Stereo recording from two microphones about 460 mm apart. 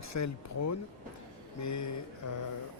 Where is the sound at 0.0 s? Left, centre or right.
Left.